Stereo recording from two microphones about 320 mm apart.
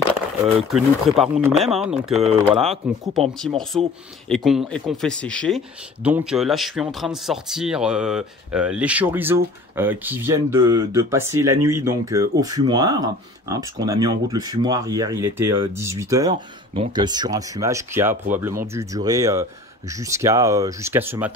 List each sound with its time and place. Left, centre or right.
0.7 s speech: centre
2.6 s speech: centre
3.2 s speech: centre